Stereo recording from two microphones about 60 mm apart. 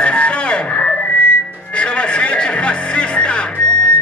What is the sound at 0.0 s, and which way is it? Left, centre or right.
Music, centre.